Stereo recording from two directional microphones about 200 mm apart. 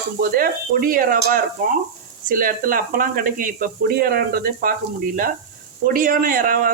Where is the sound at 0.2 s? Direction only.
45° right (ahead or behind).